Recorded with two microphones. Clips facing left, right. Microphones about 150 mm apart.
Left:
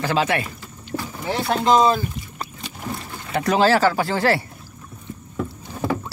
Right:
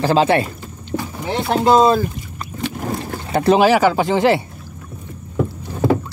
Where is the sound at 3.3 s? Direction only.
35° right (ahead or behind).